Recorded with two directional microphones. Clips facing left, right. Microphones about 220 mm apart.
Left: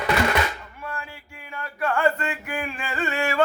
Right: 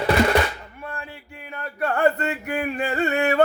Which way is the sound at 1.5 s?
40° right (ahead or behind).